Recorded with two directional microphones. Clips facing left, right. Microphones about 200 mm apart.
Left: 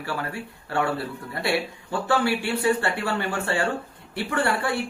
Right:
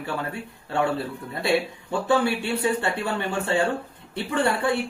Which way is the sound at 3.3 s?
20° right (ahead or behind).